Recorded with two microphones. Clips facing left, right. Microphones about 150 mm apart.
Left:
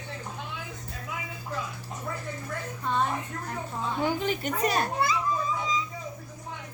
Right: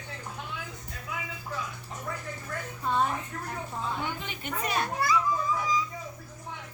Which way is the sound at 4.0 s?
35° left (ahead or behind).